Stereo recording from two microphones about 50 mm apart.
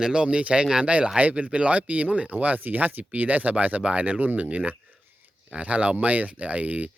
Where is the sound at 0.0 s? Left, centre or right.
Centre.